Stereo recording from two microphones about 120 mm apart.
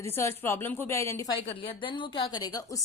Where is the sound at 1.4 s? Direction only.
45° left (ahead or behind); by 2.8 s 30° left (ahead or behind).